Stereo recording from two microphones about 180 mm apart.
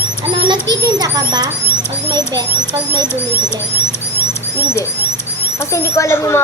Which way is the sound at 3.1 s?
15° left (ahead or behind).